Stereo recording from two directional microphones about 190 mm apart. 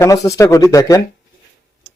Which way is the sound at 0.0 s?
15° left (ahead or behind).